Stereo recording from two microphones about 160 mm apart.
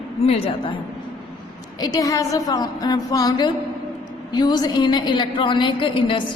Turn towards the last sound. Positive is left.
turn(degrees=30)  # may be behind; listen again after turning